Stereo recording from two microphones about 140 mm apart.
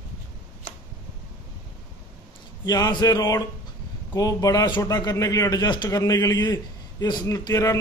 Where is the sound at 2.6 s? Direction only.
25° left (ahead or behind).